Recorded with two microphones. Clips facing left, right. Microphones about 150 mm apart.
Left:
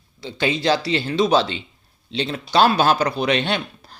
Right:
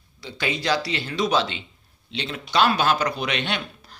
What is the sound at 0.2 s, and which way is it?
Speech, 25° left (ahead or behind).